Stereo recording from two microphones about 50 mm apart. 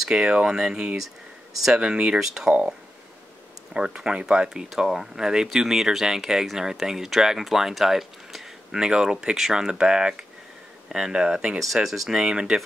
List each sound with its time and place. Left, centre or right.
0.1 s speech: centre
0.9 s speech: centre
1.7 s speech: centre
3.7 s speech: centre
11.6 s speech: centre
12.1 s speech: centre